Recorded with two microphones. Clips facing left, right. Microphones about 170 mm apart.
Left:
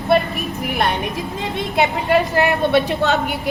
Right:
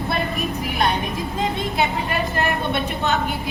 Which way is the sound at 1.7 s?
75° left (ahead or behind).